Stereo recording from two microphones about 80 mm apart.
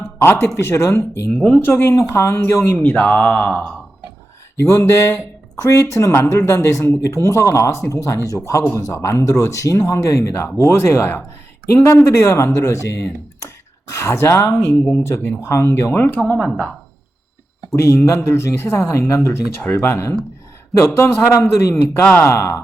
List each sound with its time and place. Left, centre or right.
0.2 s speech: left
2.7 s speech: left
4.7 s speech: left
17.7 s speech: left